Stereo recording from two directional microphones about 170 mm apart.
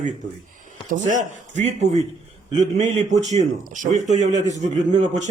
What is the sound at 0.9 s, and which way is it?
A man's voice, 45° right (ahead or behind).